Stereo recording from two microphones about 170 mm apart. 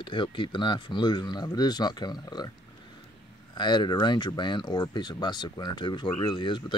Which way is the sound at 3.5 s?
25° left (ahead or behind).